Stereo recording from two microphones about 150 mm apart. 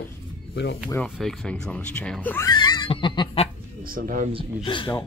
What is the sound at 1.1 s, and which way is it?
Speech, 5° left (ahead or behind).